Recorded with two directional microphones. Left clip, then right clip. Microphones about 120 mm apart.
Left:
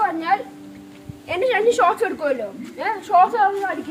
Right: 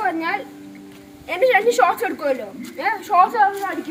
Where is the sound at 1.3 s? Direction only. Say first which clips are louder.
Right 2 dB; centre (ahead or behind).